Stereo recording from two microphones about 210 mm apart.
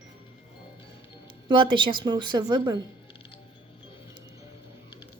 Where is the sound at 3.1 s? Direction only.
25° left (ahead or behind).